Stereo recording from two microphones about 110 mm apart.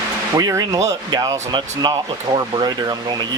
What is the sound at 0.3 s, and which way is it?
Speech, 30° right (ahead or behind).